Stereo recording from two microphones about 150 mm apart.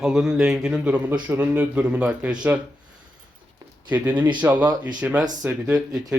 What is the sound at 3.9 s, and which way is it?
Speech, 10° right (ahead or behind).